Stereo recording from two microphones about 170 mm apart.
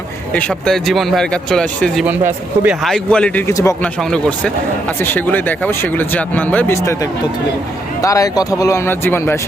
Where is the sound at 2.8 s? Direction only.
5° left (ahead or behind).